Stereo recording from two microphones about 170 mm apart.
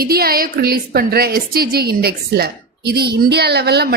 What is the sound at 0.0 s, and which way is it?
A woman's voice, 60° right (ahead or behind).